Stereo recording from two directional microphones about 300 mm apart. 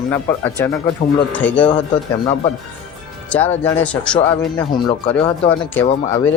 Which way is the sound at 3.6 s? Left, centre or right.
Centre.